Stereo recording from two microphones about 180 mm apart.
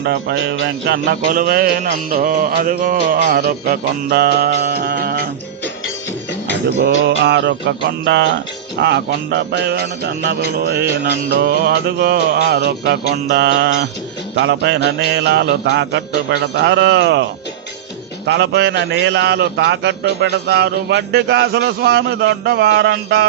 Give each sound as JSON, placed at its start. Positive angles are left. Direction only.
{"t": 0.0, "sound": "music", "side_deg": -70}
{"t": 3.3, "sound": "music", "side_deg": -60}
{"t": 6.5, "sound": "a man's voice", "side_deg": -75}
{"t": 10.2, "sound": "music", "side_deg": -60}
{"t": 14.3, "sound": "a man's voice", "side_deg": -75}
{"t": 18.3, "sound": "a man's voice", "side_deg": -75}